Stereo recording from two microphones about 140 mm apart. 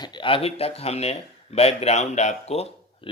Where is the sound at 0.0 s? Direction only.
35° left (ahead or behind).